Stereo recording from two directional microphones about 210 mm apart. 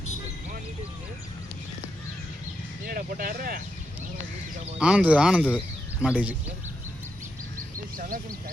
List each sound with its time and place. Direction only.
2.8 s speech: 45° right (ahead or behind)
4.8 s speech: 5° right (ahead or behind)